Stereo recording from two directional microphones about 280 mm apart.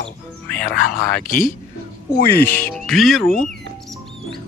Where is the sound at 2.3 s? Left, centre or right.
Centre.